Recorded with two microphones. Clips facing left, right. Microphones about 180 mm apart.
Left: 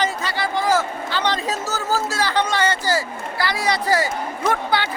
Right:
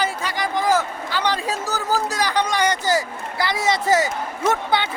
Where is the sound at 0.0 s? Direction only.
10° right (ahead or behind).